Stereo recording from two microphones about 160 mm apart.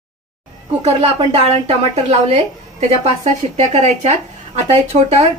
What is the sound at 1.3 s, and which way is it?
A woman's voice, 40° right (ahead or behind).